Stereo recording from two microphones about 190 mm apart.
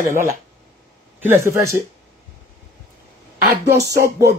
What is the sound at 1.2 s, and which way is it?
Speech, 15° right (ahead or behind).